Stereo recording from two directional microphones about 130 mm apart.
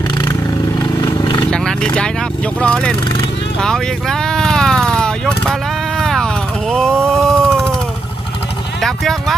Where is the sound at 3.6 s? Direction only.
5° left (ahead or behind).